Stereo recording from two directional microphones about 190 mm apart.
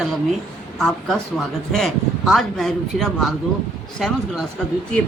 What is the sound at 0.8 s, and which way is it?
Speech, centre (ahead or behind).